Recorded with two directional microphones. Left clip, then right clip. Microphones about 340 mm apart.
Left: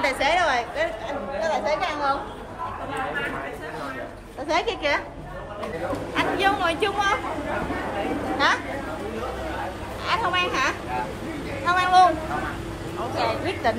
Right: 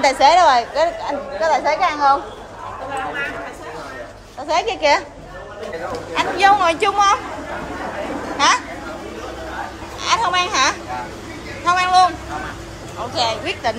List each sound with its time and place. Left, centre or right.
0.0 s a woman's voice: centre
1.4 s speech: right
4.5 s speech: centre
6.1 s a woman's voice: centre
10.0 s a woman's voice: centre
13.1 s speech: centre